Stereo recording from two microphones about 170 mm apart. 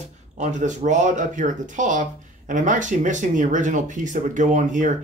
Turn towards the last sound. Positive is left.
turn(degrees=-50)  # may be behind; listen again after turning